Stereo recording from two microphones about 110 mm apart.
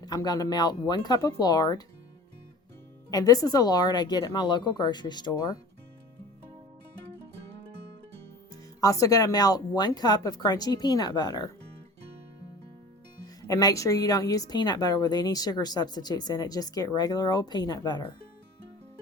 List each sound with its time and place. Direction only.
0.0 s speech: 35° left (ahead or behind)
3.1 s speech: 35° left (ahead or behind)
8.8 s speech: 30° left (ahead or behind)
13.2 s speech: 35° left (ahead or behind)